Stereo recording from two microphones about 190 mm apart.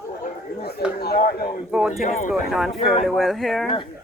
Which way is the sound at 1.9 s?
40° left (ahead or behind).